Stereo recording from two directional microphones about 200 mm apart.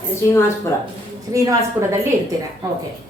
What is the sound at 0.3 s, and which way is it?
Speech, 15° left (ahead or behind).